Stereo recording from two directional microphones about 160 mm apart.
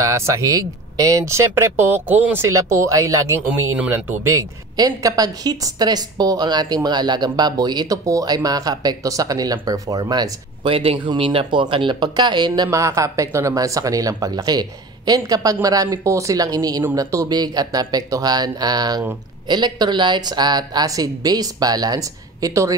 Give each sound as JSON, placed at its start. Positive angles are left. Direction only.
{"t": 0.0, "sound": "speech", "side_deg": -20}
{"t": 3.4, "sound": "a man's voice", "side_deg": -10}